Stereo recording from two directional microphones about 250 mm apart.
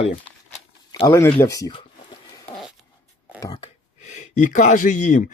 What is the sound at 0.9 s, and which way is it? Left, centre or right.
Speech, centre.